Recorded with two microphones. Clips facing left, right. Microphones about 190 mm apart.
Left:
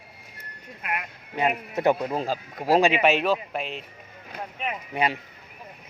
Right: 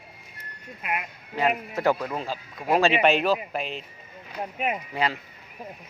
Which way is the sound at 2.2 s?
40° left (ahead or behind).